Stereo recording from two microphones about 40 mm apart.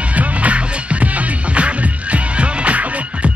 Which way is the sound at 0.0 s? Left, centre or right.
Right.